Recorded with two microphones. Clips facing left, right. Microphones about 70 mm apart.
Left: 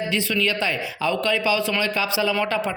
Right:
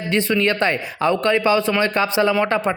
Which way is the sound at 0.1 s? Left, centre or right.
Right.